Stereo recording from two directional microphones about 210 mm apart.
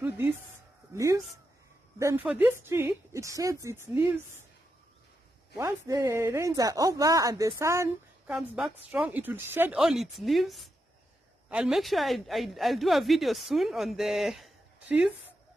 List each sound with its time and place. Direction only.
0.9 s speech: 15° right (ahead or behind)
5.6 s speech: 15° right (ahead or behind)
8.4 s a woman's voice: centre (ahead or behind)